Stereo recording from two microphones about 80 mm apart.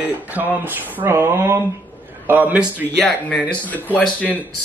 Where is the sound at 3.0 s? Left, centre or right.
Centre.